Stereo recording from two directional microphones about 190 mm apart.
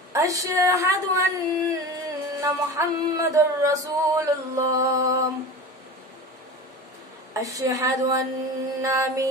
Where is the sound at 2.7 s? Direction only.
15° right (ahead or behind).